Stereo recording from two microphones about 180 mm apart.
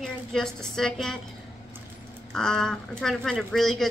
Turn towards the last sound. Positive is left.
turn(degrees=0)  # may be behind; listen again after turning